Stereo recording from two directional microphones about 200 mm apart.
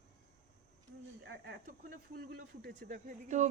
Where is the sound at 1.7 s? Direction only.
45° right (ahead or behind).